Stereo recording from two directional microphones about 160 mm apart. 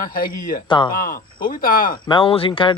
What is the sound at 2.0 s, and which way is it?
Speech, 30° left (ahead or behind).